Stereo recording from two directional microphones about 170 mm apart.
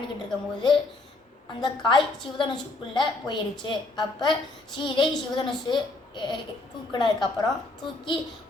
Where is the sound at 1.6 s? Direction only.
25° left (ahead or behind).